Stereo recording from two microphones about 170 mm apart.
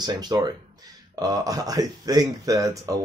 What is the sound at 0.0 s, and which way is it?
Speech, 25° right (ahead or behind).